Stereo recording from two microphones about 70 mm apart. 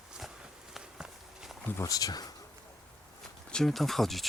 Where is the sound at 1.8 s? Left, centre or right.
Left.